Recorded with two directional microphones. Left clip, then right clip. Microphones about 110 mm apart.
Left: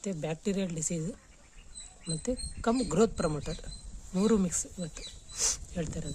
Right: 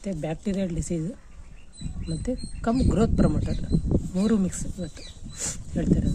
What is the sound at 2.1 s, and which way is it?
Speech, 15° left (ahead or behind).